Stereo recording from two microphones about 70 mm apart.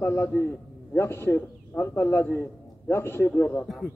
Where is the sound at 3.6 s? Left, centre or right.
Centre.